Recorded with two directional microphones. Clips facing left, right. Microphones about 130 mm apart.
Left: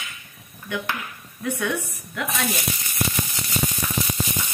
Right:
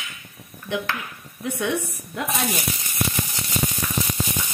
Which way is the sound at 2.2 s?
25° right (ahead or behind).